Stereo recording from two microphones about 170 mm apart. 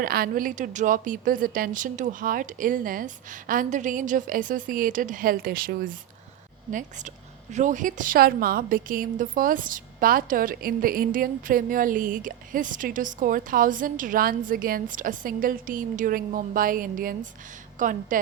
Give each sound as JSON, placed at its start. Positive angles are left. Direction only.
{"t": 0.0, "sound": "a woman's voice", "side_deg": -60}